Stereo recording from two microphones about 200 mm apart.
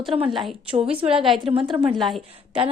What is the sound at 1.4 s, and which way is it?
Speech, 25° right (ahead or behind).